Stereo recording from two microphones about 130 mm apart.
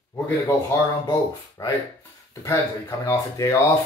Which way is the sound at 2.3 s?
25° left (ahead or behind).